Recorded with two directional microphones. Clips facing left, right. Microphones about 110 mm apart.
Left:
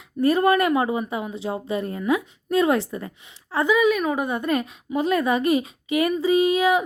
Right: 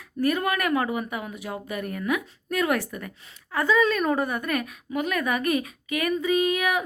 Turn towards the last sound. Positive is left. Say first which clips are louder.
# left 5 dB
turn(degrees=25)  # may be behind; listen again after turning